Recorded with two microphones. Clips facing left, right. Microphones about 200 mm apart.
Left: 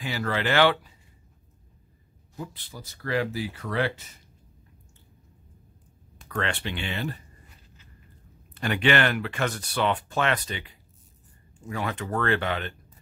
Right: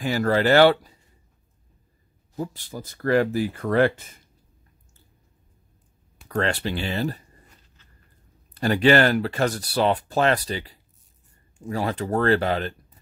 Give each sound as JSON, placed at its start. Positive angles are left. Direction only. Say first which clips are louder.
{"t": 0.0, "sound": "speech", "louder": "right 7 dB", "side_deg": -45}
{"t": 2.3, "sound": "speech", "louder": "right 7 dB", "side_deg": -40}
{"t": 6.2, "sound": "speech", "louder": "right 5 dB", "side_deg": -35}
{"t": 8.5, "sound": "speech", "louder": "right 6 dB", "side_deg": -35}